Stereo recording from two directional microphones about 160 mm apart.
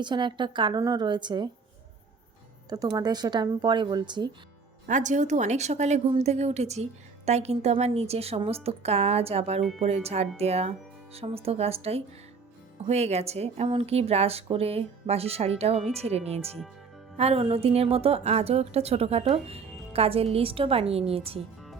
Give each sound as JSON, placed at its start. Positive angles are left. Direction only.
{"t": 0.0, "sound": "a woman's voice", "side_deg": -30}
{"t": 2.6, "sound": "a woman's voice", "side_deg": -25}
{"t": 4.9, "sound": "a woman's voice", "side_deg": -50}